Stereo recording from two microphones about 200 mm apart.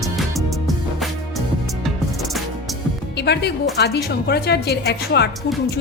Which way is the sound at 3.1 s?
55° left (ahead or behind).